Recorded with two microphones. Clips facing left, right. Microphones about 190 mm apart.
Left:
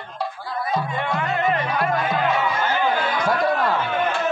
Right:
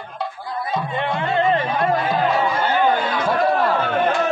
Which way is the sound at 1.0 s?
25° right (ahead or behind).